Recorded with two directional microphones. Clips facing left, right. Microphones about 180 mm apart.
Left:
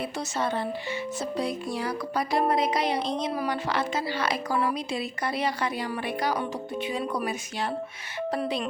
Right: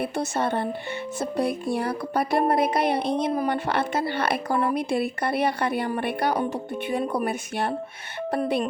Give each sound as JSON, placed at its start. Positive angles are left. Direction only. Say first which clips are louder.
{"t": 0.0, "sound": "music", "louder": "right 4 dB", "side_deg": -55}